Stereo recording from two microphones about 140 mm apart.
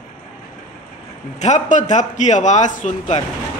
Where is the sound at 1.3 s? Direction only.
55° left (ahead or behind).